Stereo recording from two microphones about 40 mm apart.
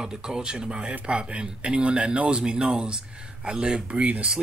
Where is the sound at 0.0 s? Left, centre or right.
Centre.